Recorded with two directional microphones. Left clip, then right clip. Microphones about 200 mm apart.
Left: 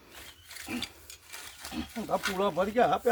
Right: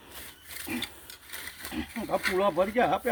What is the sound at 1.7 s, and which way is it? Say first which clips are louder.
Wild animals: right 1 dB; 10° left (ahead or behind).